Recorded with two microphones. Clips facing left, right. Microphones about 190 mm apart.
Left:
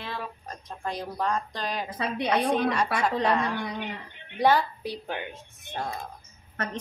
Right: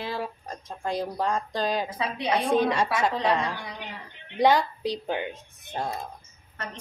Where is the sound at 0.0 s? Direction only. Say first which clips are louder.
Right 4 dB; 30° right (ahead or behind).